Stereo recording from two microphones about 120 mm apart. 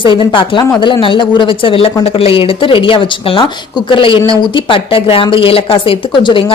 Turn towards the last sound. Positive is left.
turn(degrees=45)  # may be behind; listen again after turning